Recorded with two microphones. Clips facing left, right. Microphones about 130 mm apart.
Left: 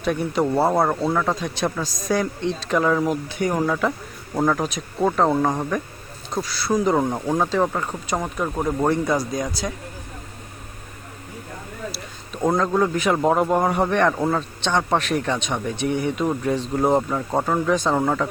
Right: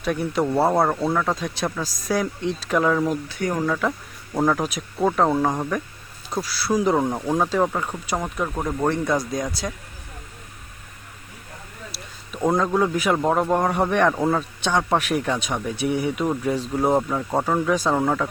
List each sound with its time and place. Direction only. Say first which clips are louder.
0.0 s a man's voice: left 1 dB; centre (ahead or behind)
3.0 s speech: left 1 dB; 15° left (ahead or behind)
4.4 s a man's voice: even; centre (ahead or behind)
11.9 s a sound: left 4 dB; 5° right (ahead or behind)
12.5 s a man's voice: left 1 dB; centre (ahead or behind)